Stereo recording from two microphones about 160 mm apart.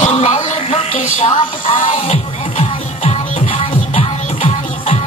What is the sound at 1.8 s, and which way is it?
Music, 50° left (ahead or behind).